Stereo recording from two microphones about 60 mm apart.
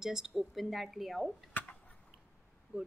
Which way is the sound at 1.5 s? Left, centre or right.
Left.